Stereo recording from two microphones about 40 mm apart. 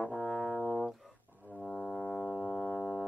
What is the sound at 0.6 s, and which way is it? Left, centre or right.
Music, centre.